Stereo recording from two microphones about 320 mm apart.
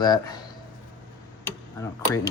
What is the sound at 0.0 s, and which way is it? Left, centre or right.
Speech, centre.